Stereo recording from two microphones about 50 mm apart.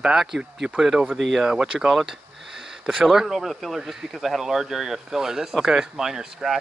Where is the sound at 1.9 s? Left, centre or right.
Centre.